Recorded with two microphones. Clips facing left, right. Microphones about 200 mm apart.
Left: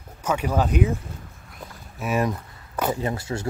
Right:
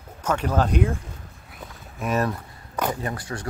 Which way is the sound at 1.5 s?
10° left (ahead or behind).